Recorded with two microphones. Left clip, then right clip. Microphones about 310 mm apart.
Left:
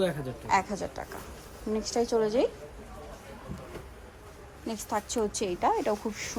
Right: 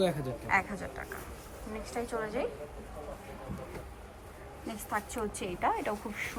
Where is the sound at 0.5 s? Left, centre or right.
Centre.